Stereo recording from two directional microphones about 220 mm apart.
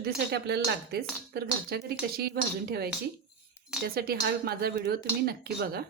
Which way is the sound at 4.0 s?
45° right (ahead or behind).